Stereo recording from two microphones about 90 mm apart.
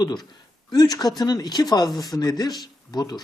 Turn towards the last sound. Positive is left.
turn(degrees=45)  # may be behind; listen again after turning